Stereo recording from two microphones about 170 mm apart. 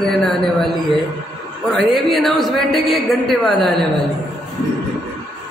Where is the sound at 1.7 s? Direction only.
Centre (ahead or behind).